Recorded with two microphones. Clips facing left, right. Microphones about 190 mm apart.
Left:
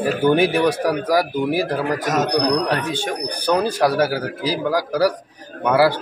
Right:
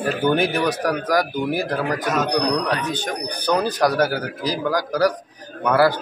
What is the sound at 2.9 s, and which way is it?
A man's voice, 10° left (ahead or behind).